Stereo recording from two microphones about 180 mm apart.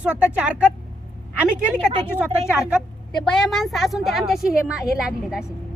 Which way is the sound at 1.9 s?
30° right (ahead or behind).